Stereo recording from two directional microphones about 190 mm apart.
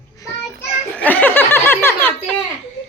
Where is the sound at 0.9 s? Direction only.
10° left (ahead or behind).